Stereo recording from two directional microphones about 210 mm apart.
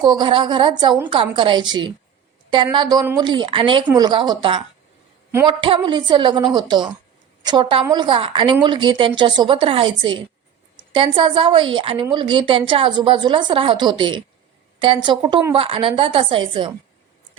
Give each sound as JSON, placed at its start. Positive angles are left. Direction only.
{"t": 0.0, "sound": "a woman's voice", "side_deg": -20}
{"t": 5.3, "sound": "a woman's voice", "side_deg": -10}
{"t": 5.5, "sound": "a woman's voice", "side_deg": -25}